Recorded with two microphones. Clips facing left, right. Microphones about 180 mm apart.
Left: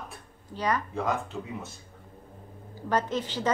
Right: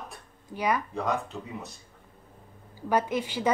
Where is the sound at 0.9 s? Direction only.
Centre (ahead or behind).